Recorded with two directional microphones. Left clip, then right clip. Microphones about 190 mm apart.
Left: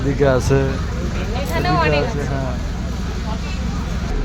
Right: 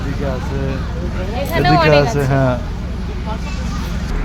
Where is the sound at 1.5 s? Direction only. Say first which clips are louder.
Right 6 dB; 50° right (ahead or behind).